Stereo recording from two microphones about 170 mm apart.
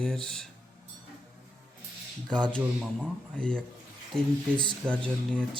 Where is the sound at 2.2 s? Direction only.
5° left (ahead or behind).